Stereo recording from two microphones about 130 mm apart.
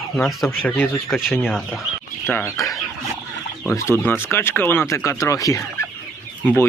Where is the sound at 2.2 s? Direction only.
20° left (ahead or behind).